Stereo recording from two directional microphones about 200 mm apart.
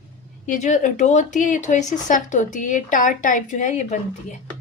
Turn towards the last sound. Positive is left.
turn(degrees=35)  # may be behind; listen again after turning